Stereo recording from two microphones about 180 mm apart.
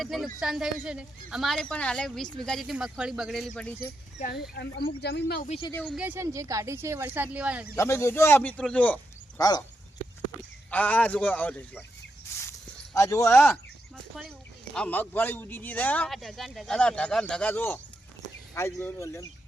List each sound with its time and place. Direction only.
0.0 s a man's voice: centre (ahead or behind)
4.3 s speech: 60° left (ahead or behind)
5.4 s speech: 30° left (ahead or behind)
5.8 s speech: 5° right (ahead or behind)
7.8 s speech: 15° left (ahead or behind)
9.4 s speech: 20° left (ahead or behind)
10.7 s speech: 10° left (ahead or behind)
12.4 s a sound: 15° left (ahead or behind)
13.9 s a man's voice: centre (ahead or behind); by 19.2 s 15° left (ahead or behind)